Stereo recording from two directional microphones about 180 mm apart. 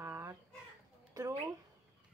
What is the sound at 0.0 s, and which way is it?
Chicken, 15° right (ahead or behind).